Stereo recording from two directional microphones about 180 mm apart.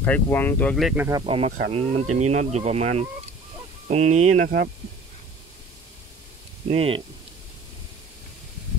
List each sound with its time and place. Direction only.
0.0 s speech: 10° left (ahead or behind)
0.9 s speech: 15° right (ahead or behind)
1.2 s speech: 30° right (ahead or behind)
6.7 s speech: 35° right (ahead or behind)